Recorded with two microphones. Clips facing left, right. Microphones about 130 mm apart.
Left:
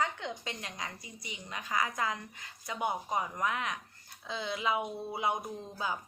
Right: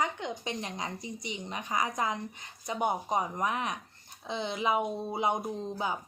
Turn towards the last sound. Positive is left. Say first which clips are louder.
# right 4 dB
turn(degrees=-20)  # may be behind; listen again after turning